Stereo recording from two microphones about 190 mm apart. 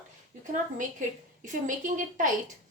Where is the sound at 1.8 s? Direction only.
45° right (ahead or behind).